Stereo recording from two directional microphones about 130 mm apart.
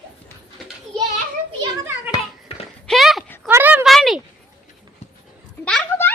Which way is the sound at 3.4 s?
15° right (ahead or behind).